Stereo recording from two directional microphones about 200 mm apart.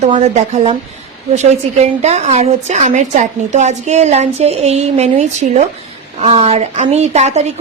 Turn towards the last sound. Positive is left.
turn(degrees=-35)  # may be behind; listen again after turning